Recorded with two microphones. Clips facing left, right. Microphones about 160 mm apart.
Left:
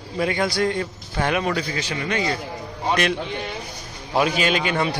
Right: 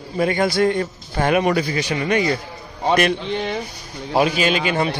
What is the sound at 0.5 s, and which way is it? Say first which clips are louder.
Speech: right 4 dB; centre (ahead or behind).